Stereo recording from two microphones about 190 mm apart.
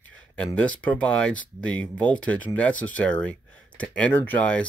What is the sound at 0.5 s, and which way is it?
Speech, 10° left (ahead or behind).